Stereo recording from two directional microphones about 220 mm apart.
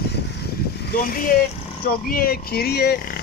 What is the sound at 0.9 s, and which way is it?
Speech, 40° left (ahead or behind).